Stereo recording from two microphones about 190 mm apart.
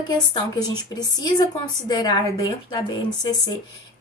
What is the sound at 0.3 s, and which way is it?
A woman's voice, 20° left (ahead or behind).